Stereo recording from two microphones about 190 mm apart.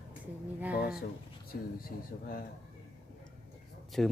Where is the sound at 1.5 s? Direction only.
50° left (ahead or behind).